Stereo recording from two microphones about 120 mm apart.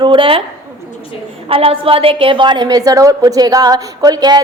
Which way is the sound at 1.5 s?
50° right (ahead or behind).